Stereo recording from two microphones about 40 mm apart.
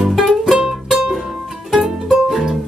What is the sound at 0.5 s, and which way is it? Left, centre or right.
Music, centre.